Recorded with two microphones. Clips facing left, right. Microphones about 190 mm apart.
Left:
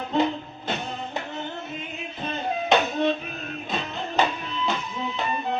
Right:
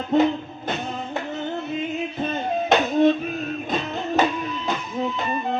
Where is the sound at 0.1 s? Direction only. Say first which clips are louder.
Right 5 dB; 50° right (ahead or behind).